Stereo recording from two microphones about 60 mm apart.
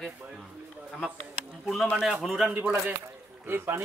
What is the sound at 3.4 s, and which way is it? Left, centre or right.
Speech, right.